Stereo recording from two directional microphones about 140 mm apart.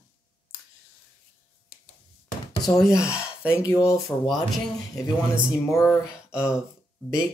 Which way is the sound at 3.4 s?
15° left (ahead or behind).